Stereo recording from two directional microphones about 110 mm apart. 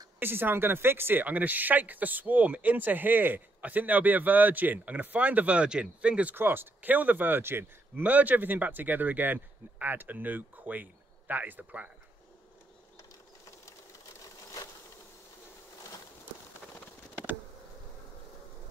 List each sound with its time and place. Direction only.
0.2 s speech: 20° right (ahead or behind)